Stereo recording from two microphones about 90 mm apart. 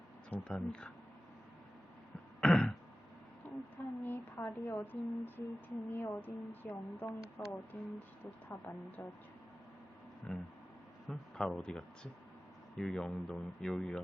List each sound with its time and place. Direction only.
0.3 s speech: 15° left (ahead or behind)
2.4 s throat clearing: 5° left (ahead or behind)
3.4 s a sound: 15° left (ahead or behind)
4.0 s speech: 25° left (ahead or behind)
10.2 s a man's voice: 10° left (ahead or behind)